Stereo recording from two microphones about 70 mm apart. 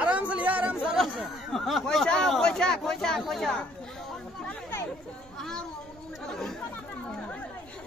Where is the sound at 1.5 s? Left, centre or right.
Centre.